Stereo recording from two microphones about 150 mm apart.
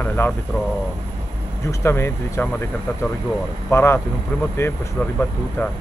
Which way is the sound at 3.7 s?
15° left (ahead or behind).